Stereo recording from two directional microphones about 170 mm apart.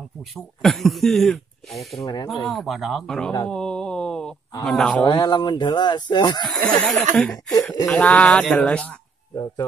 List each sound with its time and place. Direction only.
0.6 s speech: centre (ahead or behind)
5.0 s speech: 25° left (ahead or behind)
6.5 s speech: 5° left (ahead or behind)
9.3 s speech: 20° left (ahead or behind)